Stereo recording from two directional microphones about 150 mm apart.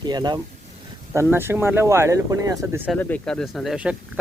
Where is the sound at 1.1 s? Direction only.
15° right (ahead or behind).